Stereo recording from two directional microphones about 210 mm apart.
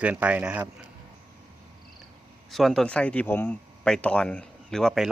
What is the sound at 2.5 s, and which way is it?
A man's voice, centre (ahead or behind).